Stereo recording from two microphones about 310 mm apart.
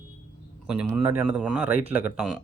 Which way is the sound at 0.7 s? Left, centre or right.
Centre.